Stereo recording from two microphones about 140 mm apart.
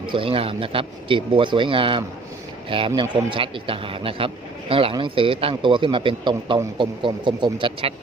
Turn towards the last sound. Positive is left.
turn(degrees=-40)  # may be behind; listen again after turning